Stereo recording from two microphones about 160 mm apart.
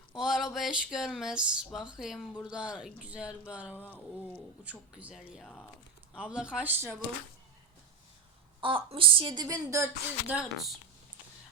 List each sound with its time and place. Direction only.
0.2 s speech: 5° right (ahead or behind)
3.8 s speech: 10° left (ahead or behind)
4.6 s speech: 10° right (ahead or behind)
8.6 s speech: 35° right (ahead or behind)
10.3 s speech: centre (ahead or behind)